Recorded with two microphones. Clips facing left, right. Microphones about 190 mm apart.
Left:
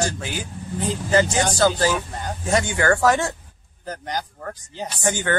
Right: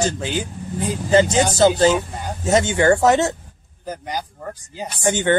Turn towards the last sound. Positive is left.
turn(degrees=-20)  # may be behind; listen again after turning